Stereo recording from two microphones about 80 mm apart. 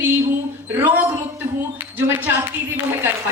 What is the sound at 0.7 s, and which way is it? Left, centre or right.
Speech, right.